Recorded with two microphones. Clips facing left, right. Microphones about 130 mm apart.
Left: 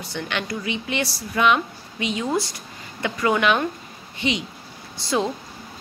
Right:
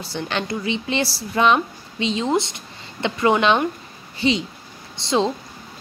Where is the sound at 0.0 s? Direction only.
30° right (ahead or behind).